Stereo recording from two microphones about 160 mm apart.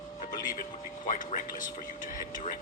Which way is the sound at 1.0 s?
55° left (ahead or behind).